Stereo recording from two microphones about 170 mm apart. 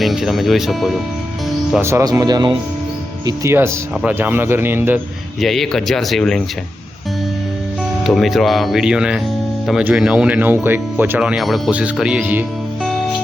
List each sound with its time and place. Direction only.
0.0 s speech: centre (ahead or behind)
1.8 s speech: 15° right (ahead or behind)
5.4 s speech: centre (ahead or behind)
8.0 s speech: centre (ahead or behind)